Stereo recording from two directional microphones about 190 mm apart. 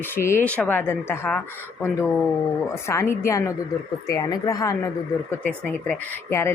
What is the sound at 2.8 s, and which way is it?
A woman's voice, 15° left (ahead or behind).